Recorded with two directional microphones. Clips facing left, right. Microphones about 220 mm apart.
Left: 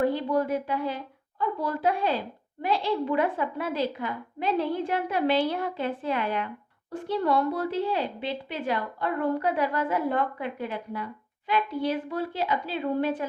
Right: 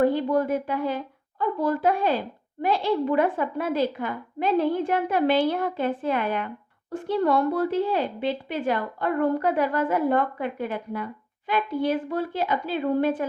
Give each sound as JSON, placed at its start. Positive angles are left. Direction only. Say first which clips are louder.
{"t": 0.0, "sound": "a woman's voice", "louder": "right 3 dB", "side_deg": -50}